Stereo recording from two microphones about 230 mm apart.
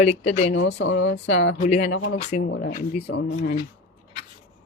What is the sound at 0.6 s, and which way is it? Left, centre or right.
Speech, left.